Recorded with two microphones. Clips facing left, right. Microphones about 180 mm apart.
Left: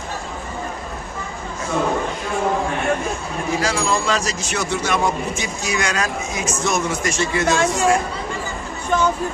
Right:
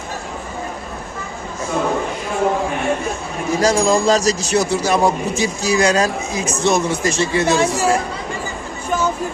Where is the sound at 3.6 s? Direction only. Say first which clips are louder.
Right 9 dB; 40° right (ahead or behind).